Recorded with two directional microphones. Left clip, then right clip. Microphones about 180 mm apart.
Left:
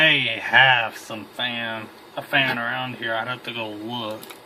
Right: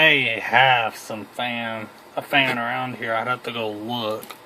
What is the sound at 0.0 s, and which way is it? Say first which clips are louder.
Speech: right 1 dB; 40° right (ahead or behind).